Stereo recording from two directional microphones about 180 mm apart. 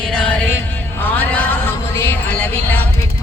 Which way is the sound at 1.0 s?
10° left (ahead or behind).